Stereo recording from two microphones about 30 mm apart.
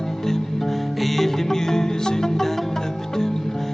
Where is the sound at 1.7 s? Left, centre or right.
Centre.